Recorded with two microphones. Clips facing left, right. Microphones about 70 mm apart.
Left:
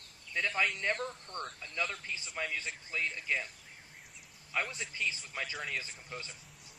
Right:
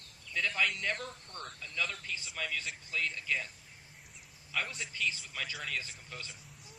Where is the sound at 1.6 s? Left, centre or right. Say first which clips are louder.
Right 2 dB; left.